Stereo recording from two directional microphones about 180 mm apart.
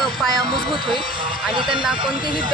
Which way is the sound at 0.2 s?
Centre (ahead or behind).